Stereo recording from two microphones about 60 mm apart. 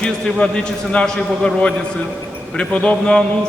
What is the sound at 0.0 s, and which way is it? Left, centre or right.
A man's voice, centre.